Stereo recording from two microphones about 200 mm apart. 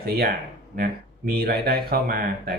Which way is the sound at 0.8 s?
50° right (ahead or behind).